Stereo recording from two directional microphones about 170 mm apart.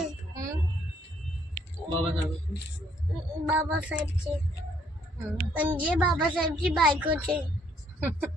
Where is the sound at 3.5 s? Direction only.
10° right (ahead or behind).